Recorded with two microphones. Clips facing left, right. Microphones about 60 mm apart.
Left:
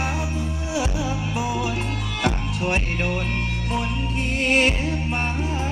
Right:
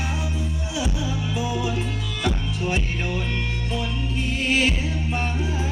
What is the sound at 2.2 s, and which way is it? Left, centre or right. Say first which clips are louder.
Music: left 2 dB; left.